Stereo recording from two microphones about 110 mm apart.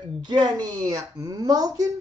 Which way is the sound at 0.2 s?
45° right (ahead or behind).